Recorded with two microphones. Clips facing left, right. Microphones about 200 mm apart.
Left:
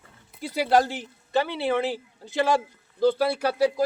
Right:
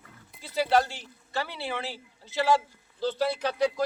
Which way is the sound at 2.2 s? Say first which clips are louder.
Left 1 dB; 15° left (ahead or behind).